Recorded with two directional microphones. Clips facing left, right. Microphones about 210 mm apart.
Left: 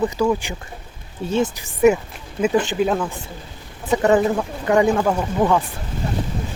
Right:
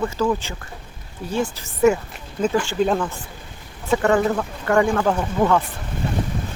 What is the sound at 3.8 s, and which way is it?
Speech, 20° left (ahead or behind).